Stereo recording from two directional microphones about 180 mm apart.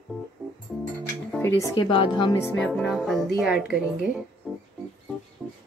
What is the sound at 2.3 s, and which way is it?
Speech, 15° left (ahead or behind).